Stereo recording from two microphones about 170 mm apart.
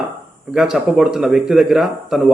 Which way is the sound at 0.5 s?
Centre (ahead or behind).